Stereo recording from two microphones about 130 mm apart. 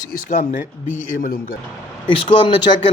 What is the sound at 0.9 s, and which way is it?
Speech, 90° left.